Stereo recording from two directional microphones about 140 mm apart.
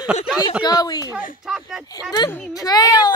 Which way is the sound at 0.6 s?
30° left (ahead or behind).